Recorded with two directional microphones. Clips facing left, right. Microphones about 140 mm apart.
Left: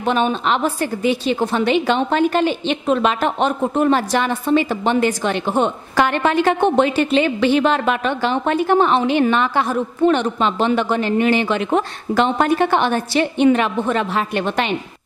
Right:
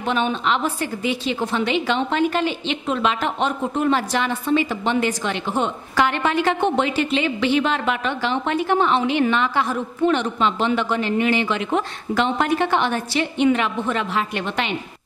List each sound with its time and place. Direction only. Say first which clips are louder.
0.0 s a woman's voice: left 3 dB; 45° left (ahead or behind)